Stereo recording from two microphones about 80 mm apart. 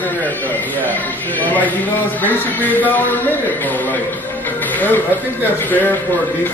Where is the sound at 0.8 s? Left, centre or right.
Left.